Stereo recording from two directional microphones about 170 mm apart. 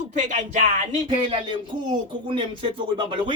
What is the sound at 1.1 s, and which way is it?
Speech, 30° right (ahead or behind).